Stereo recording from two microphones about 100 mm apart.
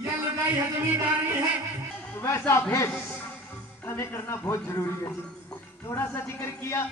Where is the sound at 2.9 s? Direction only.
15° left (ahead or behind).